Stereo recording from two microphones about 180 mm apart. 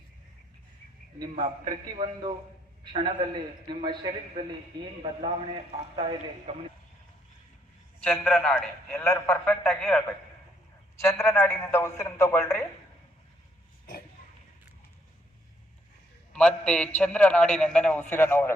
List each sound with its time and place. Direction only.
1.2 s a man's voice: 25° right (ahead or behind)
6.0 s a man's voice: 30° right (ahead or behind)
8.0 s a man's voice: centre (ahead or behind)
11.3 s a man's voice: 15° left (ahead or behind)
16.3 s a man's voice: 5° left (ahead or behind)